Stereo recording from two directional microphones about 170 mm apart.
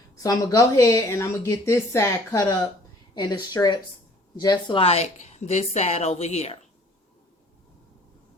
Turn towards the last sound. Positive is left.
turn(degrees=40)  # may be behind; listen again after turning